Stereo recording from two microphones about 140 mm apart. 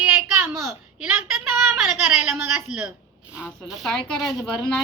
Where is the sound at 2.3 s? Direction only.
15° right (ahead or behind).